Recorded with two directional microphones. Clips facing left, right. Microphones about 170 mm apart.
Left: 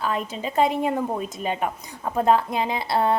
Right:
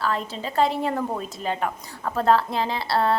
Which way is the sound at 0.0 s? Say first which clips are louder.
Even; 15° left (ahead or behind).